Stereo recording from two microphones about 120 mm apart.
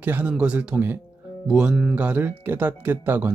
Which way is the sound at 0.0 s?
10° right (ahead or behind).